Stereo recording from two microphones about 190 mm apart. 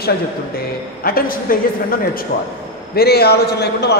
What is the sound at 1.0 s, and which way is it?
A man's voice, 50° left (ahead or behind).